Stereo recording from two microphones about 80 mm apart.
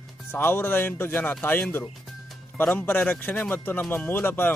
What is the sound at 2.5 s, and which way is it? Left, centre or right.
Speech, left.